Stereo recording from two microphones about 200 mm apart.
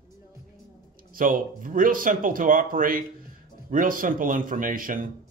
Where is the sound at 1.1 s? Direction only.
45° right (ahead or behind).